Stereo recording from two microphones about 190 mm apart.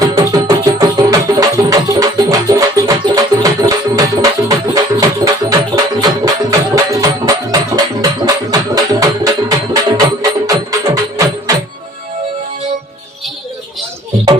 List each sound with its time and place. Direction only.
0.0 s music: 20° right (ahead or behind)